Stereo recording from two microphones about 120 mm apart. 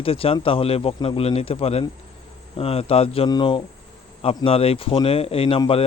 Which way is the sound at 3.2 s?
40° left (ahead or behind).